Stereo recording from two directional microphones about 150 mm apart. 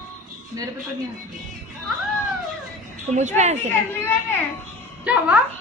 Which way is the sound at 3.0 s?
50° right (ahead or behind).